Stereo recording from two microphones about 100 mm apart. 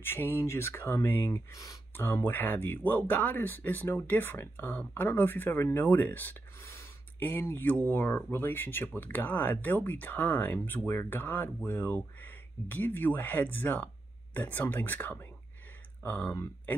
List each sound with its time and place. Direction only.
0.0 s speech: 20° left (ahead or behind)
1.5 s speech: 35° left (ahead or behind)
2.0 s speech: 25° left (ahead or behind)